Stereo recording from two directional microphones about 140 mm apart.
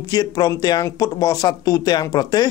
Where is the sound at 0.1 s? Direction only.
25° left (ahead or behind).